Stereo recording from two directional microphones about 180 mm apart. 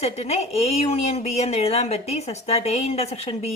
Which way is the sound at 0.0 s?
35° left (ahead or behind).